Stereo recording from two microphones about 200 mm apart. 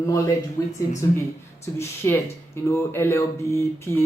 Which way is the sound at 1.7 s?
15° left (ahead or behind).